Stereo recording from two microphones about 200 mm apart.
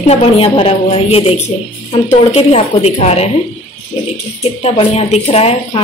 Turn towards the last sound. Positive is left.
turn(degrees=30)  # may be behind; listen again after turning